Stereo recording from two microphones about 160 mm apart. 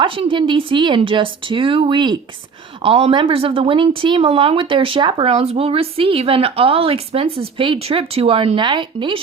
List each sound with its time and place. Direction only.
0.0 s speech: 35° right (ahead or behind)